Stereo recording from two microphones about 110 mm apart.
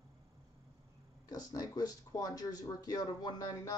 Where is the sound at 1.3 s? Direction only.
35° left (ahead or behind).